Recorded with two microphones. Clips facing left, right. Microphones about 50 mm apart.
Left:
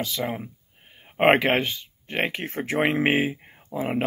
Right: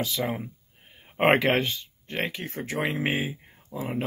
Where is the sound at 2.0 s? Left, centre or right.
Left.